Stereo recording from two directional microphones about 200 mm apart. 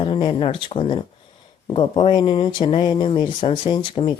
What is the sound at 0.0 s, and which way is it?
Speech, 25° left (ahead or behind).